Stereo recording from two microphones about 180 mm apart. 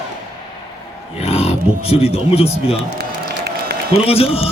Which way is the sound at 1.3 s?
35° left (ahead or behind).